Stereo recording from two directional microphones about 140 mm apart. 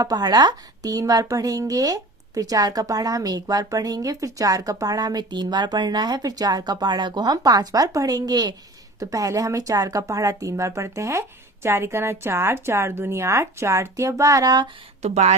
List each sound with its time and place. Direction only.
0.0 s speech: 30° right (ahead or behind)
15.0 s speech: 50° right (ahead or behind)